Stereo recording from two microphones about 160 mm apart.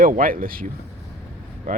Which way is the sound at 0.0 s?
60° right (ahead or behind).